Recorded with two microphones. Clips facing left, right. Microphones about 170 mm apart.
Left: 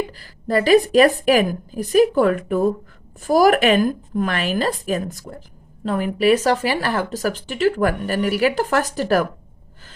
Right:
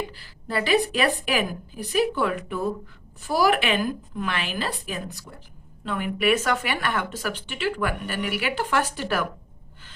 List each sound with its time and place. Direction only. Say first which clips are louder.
0.1 s a woman's voice: left 9 dB; 45° left (ahead or behind)